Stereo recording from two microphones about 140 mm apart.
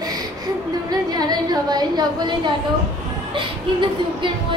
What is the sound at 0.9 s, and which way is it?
A woman's voice, 30° right (ahead or behind).